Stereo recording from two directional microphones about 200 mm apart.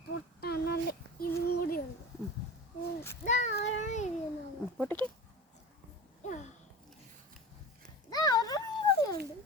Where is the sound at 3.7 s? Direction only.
35° left (ahead or behind).